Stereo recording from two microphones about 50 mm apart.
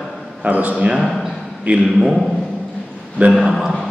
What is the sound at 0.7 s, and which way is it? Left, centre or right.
A man's voice, centre.